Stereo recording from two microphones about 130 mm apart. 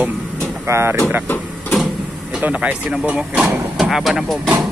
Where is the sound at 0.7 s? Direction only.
20° right (ahead or behind).